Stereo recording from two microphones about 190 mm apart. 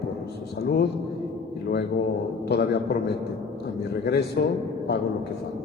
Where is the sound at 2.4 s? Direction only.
60° left (ahead or behind).